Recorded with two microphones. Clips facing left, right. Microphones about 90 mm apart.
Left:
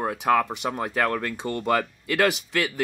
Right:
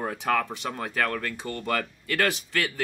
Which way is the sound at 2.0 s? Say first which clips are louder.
Left 4 dB; 15° left (ahead or behind).